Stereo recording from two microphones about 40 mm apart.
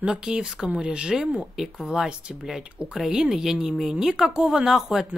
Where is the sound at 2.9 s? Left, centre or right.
Centre.